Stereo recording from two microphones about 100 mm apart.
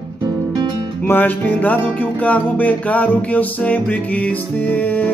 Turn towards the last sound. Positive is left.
turn(degrees=15)  # may be behind; listen again after turning